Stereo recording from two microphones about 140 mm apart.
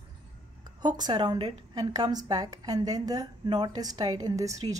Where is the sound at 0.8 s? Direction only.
35° right (ahead or behind).